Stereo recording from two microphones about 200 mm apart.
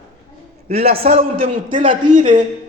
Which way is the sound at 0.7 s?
30° right (ahead or behind).